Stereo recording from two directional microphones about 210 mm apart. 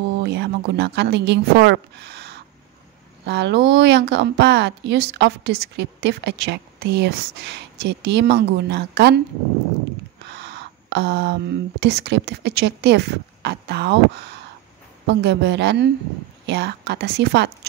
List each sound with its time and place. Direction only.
0.2 s a woman's voice: 50° right (ahead or behind)
10.2 s speech: 55° right (ahead or behind)
15.0 s a woman's voice: 55° right (ahead or behind)